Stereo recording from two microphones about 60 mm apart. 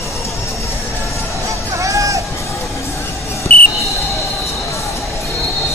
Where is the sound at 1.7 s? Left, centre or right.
Right.